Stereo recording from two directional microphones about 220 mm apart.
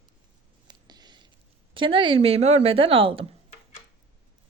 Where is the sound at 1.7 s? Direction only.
25° right (ahead or behind).